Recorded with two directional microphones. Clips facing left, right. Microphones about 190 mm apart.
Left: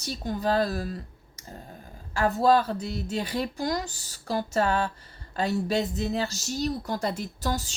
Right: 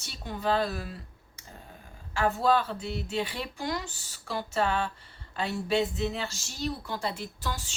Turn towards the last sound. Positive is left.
turn(degrees=40)  # may be behind; listen again after turning